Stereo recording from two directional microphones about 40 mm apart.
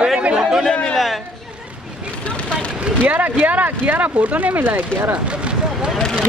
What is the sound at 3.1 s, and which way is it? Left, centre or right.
Speech, right.